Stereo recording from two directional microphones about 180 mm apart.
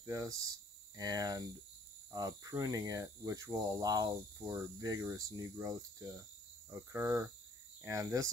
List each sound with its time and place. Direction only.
0.0 s speech: 15° right (ahead or behind)